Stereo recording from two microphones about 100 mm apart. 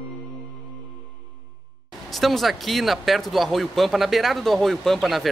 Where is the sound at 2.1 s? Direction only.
Centre (ahead or behind).